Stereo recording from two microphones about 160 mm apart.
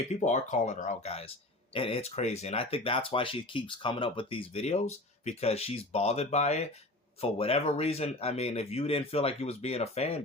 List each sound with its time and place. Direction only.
0.1 s speech: 45° left (ahead or behind)